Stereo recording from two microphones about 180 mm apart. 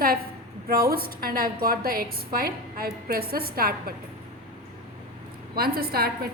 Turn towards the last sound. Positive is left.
turn(degrees=-60)  # may be behind; listen again after turning